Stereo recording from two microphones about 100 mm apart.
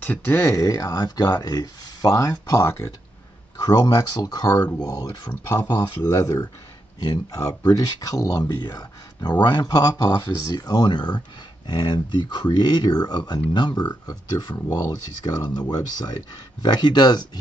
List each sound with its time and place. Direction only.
0.0 s speech: 20° left (ahead or behind)
0.6 s speech: 35° left (ahead or behind)
5.3 s speech: 20° left (ahead or behind)
5.8 s speech: 35° left (ahead or behind)